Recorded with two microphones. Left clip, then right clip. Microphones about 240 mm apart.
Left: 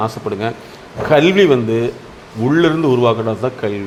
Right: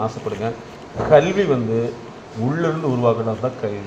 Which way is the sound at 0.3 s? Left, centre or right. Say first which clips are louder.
Left 4 dB; left.